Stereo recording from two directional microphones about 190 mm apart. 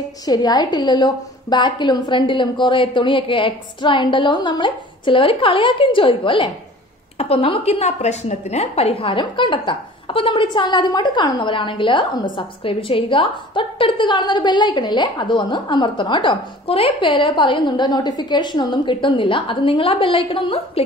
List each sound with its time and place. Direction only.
0.2 s a woman's voice: 20° left (ahead or behind)